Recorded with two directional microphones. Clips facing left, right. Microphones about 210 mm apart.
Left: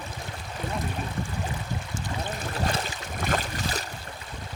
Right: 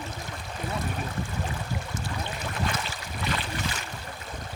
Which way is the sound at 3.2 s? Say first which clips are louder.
Left 3 dB; 45° left (ahead or behind).